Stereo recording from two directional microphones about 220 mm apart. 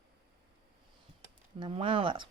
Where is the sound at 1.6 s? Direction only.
25° right (ahead or behind).